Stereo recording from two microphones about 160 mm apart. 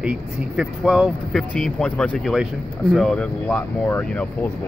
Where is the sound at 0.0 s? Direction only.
5° right (ahead or behind).